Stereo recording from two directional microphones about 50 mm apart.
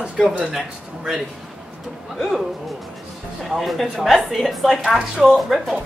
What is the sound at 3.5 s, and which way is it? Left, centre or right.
Speech, centre.